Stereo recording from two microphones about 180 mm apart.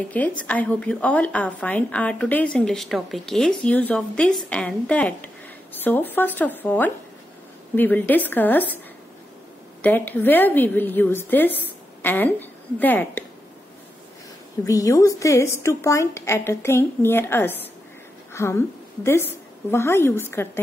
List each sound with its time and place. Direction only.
0.1 s a woman's voice: 10° left (ahead or behind)
14.6 s a woman's voice: 15° left (ahead or behind)
19.7 s a woman's voice: 15° left (ahead or behind)